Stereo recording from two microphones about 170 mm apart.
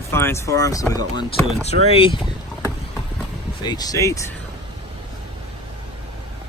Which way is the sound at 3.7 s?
20° left (ahead or behind).